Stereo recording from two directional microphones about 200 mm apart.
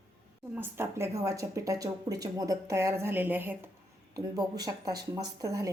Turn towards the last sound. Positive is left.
turn(degrees=-15)  # may be behind; listen again after turning